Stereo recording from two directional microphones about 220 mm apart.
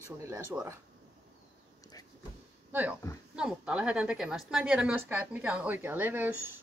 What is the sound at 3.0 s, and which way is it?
Speech, 15° left (ahead or behind).